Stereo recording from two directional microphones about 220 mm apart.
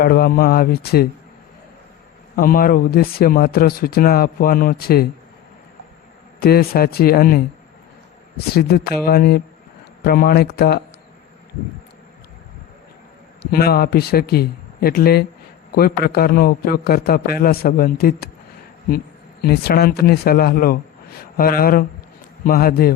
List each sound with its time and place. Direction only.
0.0 s a man's voice: 45° left (ahead or behind)
2.3 s speech: 40° left (ahead or behind)
6.4 s a man's voice: 45° left (ahead or behind)
8.5 s a man's voice: 45° left (ahead or behind)
13.4 s a man's voice: 45° left (ahead or behind)